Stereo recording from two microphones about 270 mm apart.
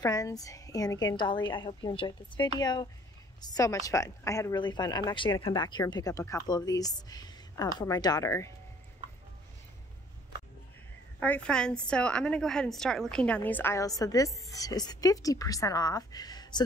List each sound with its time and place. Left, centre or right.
0.0 s a woman's voice: centre
11.1 s a woman's voice: centre